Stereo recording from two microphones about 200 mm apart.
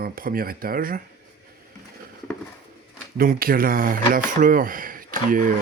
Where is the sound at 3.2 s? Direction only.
45° right (ahead or behind).